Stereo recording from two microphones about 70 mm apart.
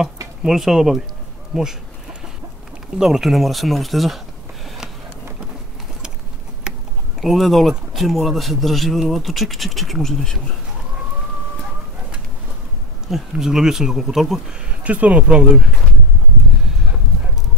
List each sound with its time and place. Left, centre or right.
0.4 s speech: centre
3.0 s speech: centre
6.7 s a sound: centre
7.2 s speech: centre
13.1 s speech: centre
14.8 s speech: centre